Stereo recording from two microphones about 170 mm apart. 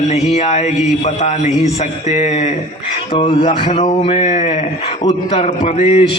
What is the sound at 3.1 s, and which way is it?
A man's voice, 30° left (ahead or behind).